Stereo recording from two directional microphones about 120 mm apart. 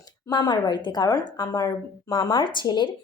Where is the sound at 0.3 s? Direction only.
35° left (ahead or behind).